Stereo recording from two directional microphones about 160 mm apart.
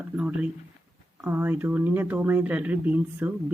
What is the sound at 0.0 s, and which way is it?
Speech, 10° right (ahead or behind).